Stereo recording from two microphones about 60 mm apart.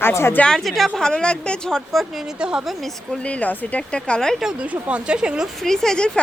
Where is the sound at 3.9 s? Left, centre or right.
Centre.